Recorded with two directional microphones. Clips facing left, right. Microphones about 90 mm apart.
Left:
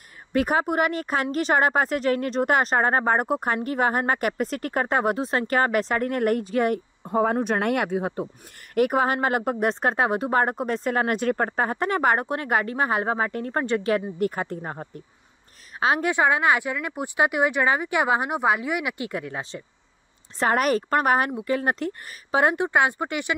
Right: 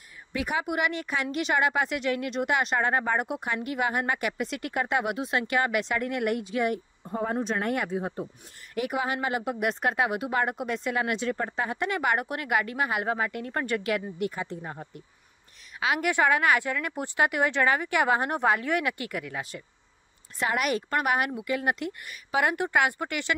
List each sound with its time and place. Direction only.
0.3 s speech: 45° left (ahead or behind)
7.1 s speech: 75° left (ahead or behind)
8.7 s speech: 50° left (ahead or behind)
9.7 s speech: 35° left (ahead or behind)
15.8 s speech: 35° left (ahead or behind)
16.1 s speech: 20° left (ahead or behind)
20.3 s speech: 40° left (ahead or behind); by 23.3 s 20° left (ahead or behind)